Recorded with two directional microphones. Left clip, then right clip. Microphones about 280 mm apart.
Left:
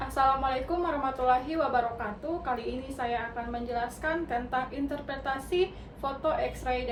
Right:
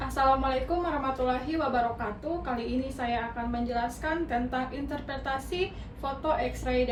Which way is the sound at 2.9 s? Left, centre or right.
Centre.